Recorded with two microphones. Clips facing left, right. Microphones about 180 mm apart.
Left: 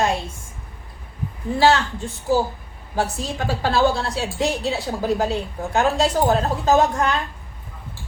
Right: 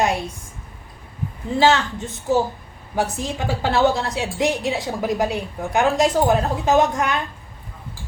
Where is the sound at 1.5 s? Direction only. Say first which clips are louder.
Even; 20° right (ahead or behind).